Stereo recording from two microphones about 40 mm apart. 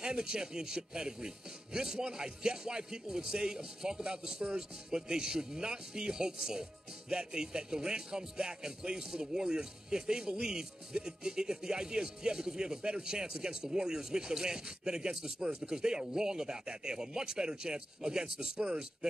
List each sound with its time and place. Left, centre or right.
0.0 s speech: centre